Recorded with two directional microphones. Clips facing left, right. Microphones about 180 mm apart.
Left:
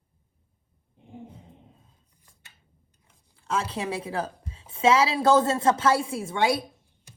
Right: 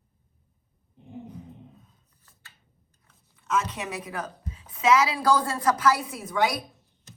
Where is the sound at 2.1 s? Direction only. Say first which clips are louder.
Right 2 dB; 15° left (ahead or behind).